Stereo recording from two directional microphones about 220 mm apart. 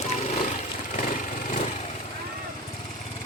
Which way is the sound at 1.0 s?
35° left (ahead or behind).